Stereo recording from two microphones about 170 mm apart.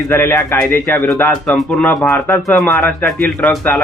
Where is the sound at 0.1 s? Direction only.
15° left (ahead or behind).